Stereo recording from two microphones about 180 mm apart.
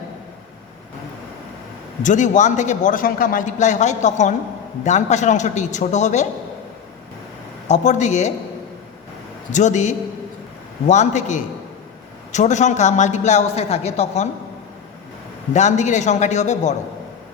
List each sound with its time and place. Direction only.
2.0 s a man's voice: 45° left (ahead or behind)
7.7 s a man's voice: 40° left (ahead or behind)
9.5 s a man's voice: 40° left (ahead or behind)
15.5 s a man's voice: 40° left (ahead or behind)